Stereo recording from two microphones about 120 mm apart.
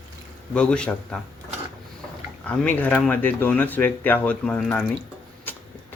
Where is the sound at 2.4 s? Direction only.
15° left (ahead or behind).